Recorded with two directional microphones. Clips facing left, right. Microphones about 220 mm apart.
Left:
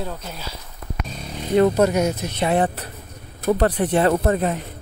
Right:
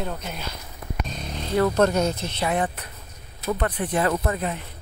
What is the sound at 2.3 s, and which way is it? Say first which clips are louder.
Speech: left 8 dB; 30° left (ahead or behind).